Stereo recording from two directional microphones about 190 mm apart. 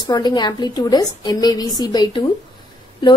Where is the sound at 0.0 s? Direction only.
20° left (ahead or behind).